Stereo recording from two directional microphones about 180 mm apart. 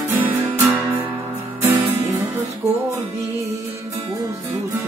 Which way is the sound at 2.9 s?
15° right (ahead or behind).